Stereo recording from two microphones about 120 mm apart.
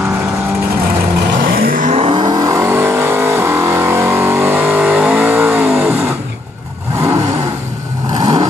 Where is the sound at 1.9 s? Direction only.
45° right (ahead or behind); by 6.1 s 10° right (ahead or behind).